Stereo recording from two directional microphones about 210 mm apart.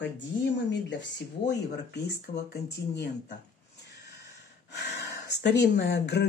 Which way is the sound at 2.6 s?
50° left (ahead or behind).